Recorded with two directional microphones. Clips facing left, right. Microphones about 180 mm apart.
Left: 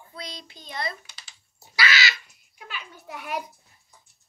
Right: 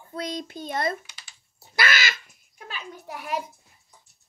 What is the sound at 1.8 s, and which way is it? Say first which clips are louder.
Crow: even; 50° right (ahead or behind).